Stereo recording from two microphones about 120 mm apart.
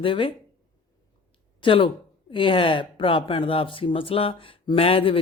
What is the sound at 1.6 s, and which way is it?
Speech, 45° left (ahead or behind).